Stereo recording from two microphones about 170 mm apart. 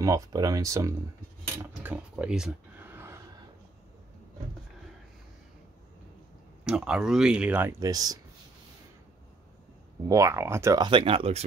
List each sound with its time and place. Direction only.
0.0 s speech: 20° right (ahead or behind)
1.6 s a sound: 10° right (ahead or behind)
6.6 s speech: 5° right (ahead or behind); by 8.2 s 20° right (ahead or behind)
10.0 s speech: 20° right (ahead or behind); by 11.4 s 35° right (ahead or behind)